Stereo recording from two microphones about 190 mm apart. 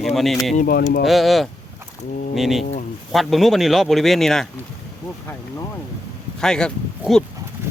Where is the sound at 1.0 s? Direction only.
Centre (ahead or behind).